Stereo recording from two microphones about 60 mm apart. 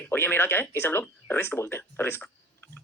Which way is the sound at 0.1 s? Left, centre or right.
Left.